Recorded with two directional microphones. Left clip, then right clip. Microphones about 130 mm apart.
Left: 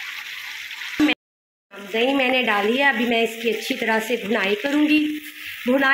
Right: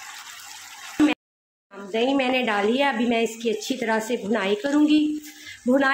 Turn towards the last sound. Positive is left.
turn(degrees=-20)  # may be behind; listen again after turning